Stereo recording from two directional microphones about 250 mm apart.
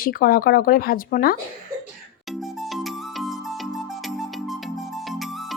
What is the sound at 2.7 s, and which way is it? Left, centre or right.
Music, centre.